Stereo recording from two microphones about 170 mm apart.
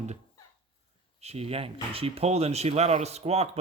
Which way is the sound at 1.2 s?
40° right (ahead or behind).